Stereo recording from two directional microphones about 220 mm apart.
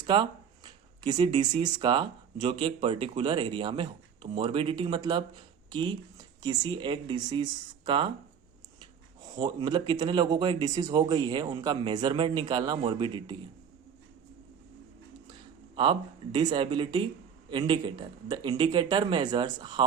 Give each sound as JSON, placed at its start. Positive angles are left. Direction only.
{"t": 0.0, "sound": "speech", "side_deg": -20}
{"t": 9.3, "sound": "speech", "side_deg": -20}
{"t": 15.3, "sound": "speech", "side_deg": -20}